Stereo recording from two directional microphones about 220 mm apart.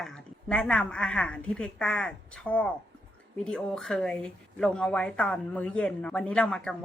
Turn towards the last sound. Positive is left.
turn(degrees=5)  # may be behind; listen again after turning